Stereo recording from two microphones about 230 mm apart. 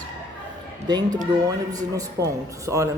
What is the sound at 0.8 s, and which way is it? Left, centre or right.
A woman's voice, centre.